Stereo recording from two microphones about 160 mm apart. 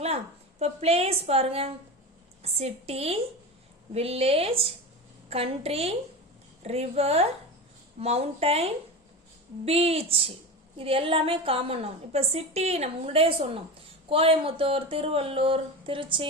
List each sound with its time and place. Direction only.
0.6 s a woman's voice: 40° right (ahead or behind)